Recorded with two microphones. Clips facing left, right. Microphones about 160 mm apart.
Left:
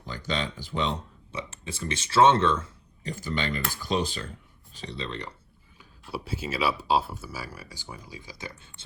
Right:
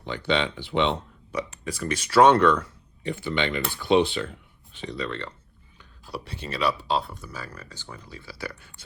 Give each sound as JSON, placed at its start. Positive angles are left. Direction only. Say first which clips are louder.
{"t": 0.1, "sound": "speech", "louder": "right 6 dB", "side_deg": 40}
{"t": 1.3, "sound": "speech", "louder": "right 6 dB", "side_deg": 25}
{"t": 3.0, "sound": "speech", "louder": "right 4 dB", "side_deg": 40}
{"t": 4.9, "sound": "speech", "louder": "right 4 dB", "side_deg": 20}
{"t": 6.1, "sound": "speech", "louder": "left 2 dB", "side_deg": 0}